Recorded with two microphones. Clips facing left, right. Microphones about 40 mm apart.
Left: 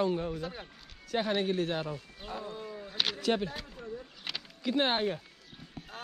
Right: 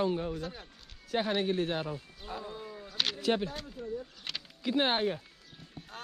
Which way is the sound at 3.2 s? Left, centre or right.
Centre.